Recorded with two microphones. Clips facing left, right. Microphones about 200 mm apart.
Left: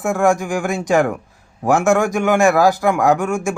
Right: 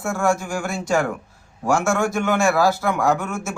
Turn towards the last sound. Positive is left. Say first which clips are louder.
# left 5 dB
turn(degrees=15)  # may be behind; listen again after turning